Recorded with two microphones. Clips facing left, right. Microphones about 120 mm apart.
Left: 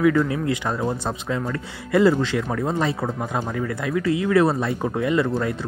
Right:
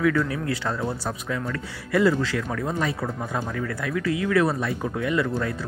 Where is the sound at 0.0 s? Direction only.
20° left (ahead or behind).